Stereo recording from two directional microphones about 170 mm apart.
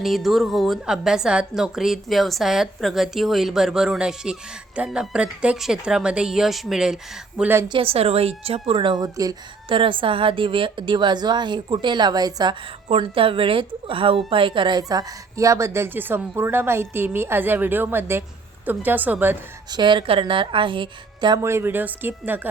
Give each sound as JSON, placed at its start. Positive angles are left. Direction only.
{"t": 0.0, "sound": "a woman's voice", "side_deg": 0}
{"t": 7.7, "sound": "a woman's voice", "side_deg": -35}
{"t": 19.7, "sound": "a woman's voice", "side_deg": -30}
{"t": 21.4, "sound": "a woman's voice", "side_deg": -15}